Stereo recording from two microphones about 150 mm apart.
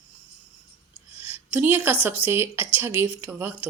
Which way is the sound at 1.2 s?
10° right (ahead or behind).